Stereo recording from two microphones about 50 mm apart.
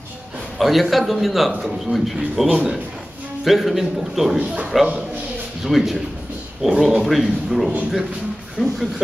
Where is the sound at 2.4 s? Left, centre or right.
Right.